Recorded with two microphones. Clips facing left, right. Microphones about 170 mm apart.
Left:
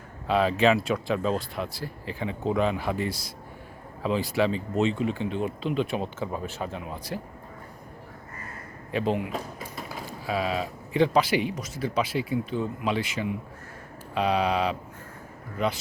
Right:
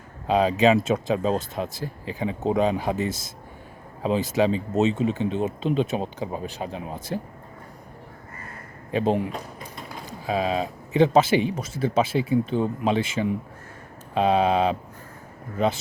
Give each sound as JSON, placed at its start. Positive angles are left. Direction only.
{"t": 0.3, "sound": "speech", "side_deg": -20}
{"t": 7.1, "sound": "speech", "side_deg": -30}
{"t": 9.0, "sound": "speech", "side_deg": -35}
{"t": 9.3, "sound": "speech", "side_deg": 5}
{"t": 10.1, "sound": "speech", "side_deg": -20}